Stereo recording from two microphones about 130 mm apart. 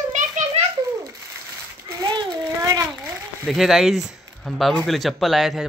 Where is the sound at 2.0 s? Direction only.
35° right (ahead or behind).